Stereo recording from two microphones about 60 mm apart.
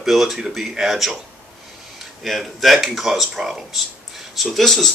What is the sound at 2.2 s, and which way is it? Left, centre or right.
Speech, centre.